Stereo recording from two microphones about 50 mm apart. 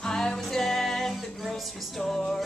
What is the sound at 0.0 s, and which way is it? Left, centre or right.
Music, centre.